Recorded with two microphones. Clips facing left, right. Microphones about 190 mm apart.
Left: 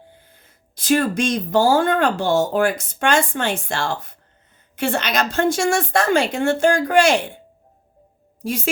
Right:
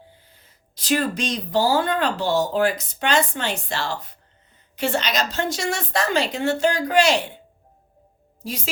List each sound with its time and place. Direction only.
0.3 s speech: 50° left (ahead or behind)
8.4 s speech: 50° left (ahead or behind)